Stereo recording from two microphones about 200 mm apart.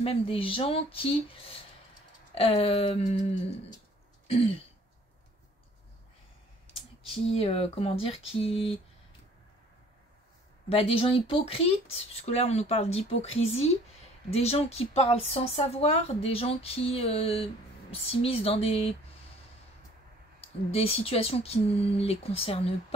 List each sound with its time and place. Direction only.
0.0 s speech: 30° left (ahead or behind)
6.7 s speech: 30° left (ahead or behind)
10.7 s a woman's voice: 30° left (ahead or behind)
20.3 s speech: 30° left (ahead or behind)